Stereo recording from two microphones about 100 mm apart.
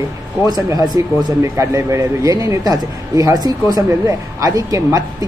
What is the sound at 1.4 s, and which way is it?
A man's voice, 30° right (ahead or behind).